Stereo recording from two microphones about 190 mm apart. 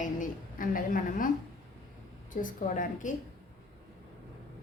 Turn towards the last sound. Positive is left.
turn(degrees=45)  # may be behind; listen again after turning